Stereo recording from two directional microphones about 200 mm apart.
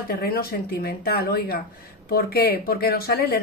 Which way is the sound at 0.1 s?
50° left (ahead or behind).